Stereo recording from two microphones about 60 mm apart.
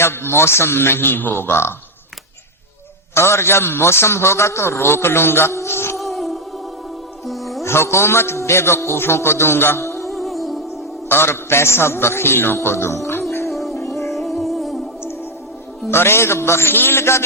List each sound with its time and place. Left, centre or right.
0.0 s a man's voice: left
3.2 s a man's voice: left
6.0 s music: centre
7.6 s a man's voice: left
10.1 s music: centre
11.1 s a man's voice: left
13.5 s music: centre
15.9 s a man's voice: left